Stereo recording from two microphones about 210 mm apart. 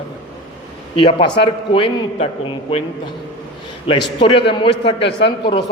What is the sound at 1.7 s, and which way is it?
A man's voice, 25° left (ahead or behind).